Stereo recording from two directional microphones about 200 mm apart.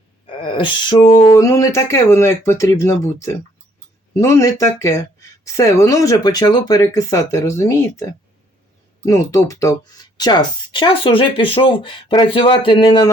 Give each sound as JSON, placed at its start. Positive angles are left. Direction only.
{"t": 0.4, "sound": "speech", "side_deg": 25}
{"t": 9.0, "sound": "speech", "side_deg": 15}